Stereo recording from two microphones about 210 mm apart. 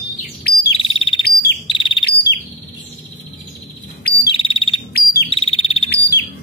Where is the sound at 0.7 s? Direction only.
25° left (ahead or behind).